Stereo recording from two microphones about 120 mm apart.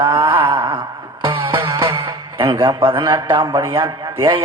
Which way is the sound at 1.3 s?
45° right (ahead or behind).